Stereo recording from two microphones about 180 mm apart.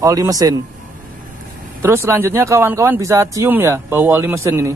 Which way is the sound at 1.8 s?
15° right (ahead or behind).